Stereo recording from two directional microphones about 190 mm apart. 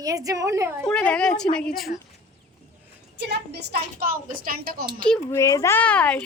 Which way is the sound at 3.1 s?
60° right (ahead or behind).